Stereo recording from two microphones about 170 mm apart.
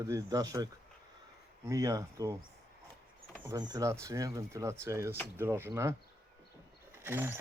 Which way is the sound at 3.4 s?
20° right (ahead or behind).